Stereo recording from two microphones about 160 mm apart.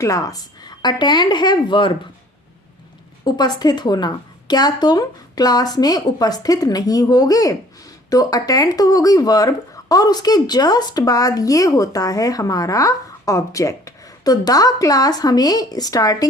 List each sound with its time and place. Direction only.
0.0 s speech: 20° left (ahead or behind)
3.2 s speech: 25° left (ahead or behind)